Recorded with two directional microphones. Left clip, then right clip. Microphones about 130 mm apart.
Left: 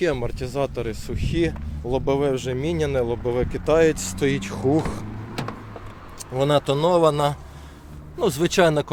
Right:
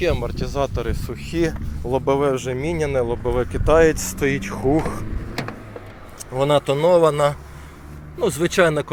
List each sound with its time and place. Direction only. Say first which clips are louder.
0.0 s speech: right 2 dB; 35° left (ahead or behind); by 2.5 s 5° left (ahead or behind)
2.5 s speech: right 2 dB; 20° left (ahead or behind)
4.4 s speech: right 2 dB; 20° left (ahead or behind)
6.3 s speech: right 2 dB; 25° left (ahead or behind)